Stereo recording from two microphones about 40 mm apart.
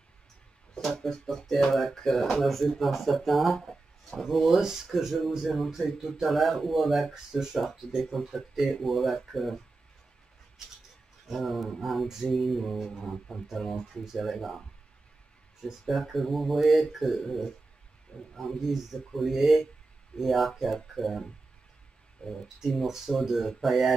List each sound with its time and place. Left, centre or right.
1.1 s speech: centre
4.9 s speech: centre
11.2 s speech: centre
15.8 s speech: centre
22.2 s speech: left
22.8 s speech: centre